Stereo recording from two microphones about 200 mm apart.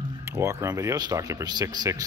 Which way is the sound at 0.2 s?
15° right (ahead or behind).